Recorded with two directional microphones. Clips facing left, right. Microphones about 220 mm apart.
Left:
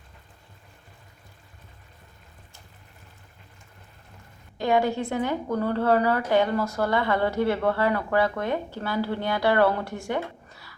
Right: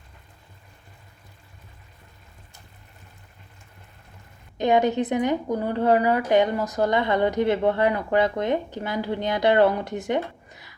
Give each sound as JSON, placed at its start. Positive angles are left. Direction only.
{"t": 4.5, "sound": "a woman's voice", "side_deg": -20}